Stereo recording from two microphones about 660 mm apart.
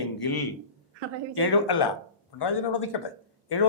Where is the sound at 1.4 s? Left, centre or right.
Left.